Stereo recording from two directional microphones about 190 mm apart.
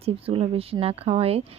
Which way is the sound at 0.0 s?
30° right (ahead or behind).